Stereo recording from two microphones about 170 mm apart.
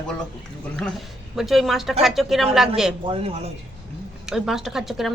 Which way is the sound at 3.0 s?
35° right (ahead or behind).